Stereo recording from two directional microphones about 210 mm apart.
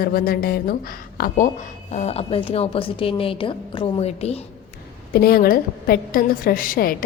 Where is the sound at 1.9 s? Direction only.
30° left (ahead or behind).